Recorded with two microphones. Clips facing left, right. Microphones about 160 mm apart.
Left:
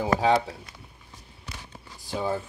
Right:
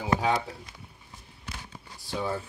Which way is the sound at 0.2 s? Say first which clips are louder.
Left 5 dB; 30° left (ahead or behind).